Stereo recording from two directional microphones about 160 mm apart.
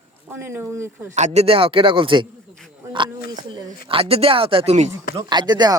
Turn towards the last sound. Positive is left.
turn(degrees=-25)  # may be behind; listen again after turning